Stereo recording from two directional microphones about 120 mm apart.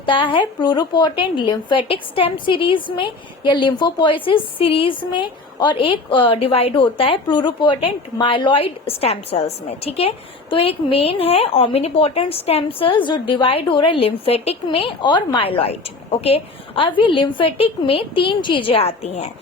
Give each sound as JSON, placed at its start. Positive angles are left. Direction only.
{"t": 0.0, "sound": "a woman's voice", "side_deg": 45}